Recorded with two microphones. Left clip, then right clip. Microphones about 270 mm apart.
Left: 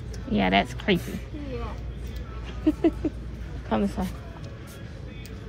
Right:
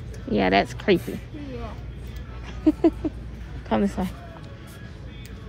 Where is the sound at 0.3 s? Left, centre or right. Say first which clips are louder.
Right 3 dB; right.